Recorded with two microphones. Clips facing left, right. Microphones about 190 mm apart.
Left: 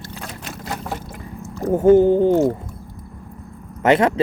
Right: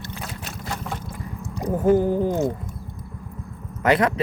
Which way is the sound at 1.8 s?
25° left (ahead or behind).